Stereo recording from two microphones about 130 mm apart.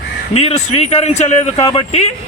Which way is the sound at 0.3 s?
55° left (ahead or behind).